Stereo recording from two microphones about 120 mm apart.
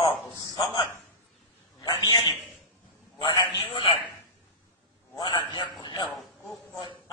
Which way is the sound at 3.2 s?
30° left (ahead or behind).